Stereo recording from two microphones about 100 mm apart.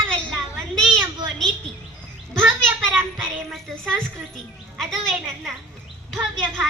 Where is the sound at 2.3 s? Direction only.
5° left (ahead or behind).